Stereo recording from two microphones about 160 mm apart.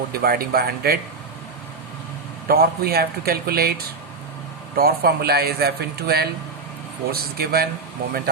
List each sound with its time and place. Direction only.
0.1 s speech: 70° right (ahead or behind)
2.5 s speech: 70° right (ahead or behind)